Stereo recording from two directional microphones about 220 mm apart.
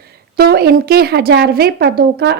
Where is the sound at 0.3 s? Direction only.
45° right (ahead or behind).